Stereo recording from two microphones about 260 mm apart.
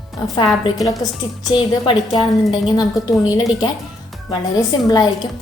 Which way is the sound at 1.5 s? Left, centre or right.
Centre.